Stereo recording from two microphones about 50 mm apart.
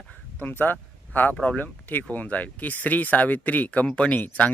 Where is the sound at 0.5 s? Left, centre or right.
Left.